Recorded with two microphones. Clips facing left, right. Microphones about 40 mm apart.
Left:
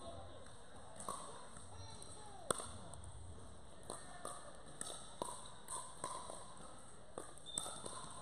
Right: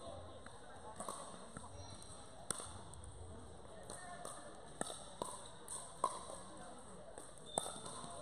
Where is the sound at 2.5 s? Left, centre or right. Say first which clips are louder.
Left 8 dB; left.